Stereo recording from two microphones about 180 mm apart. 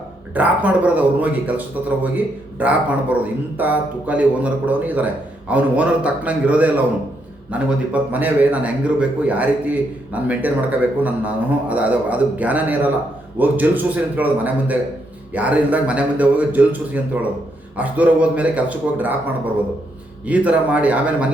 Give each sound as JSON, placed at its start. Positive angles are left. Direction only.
{"t": 0.3, "sound": "a man's voice", "side_deg": -10}
{"t": 20.2, "sound": "a man's voice", "side_deg": -10}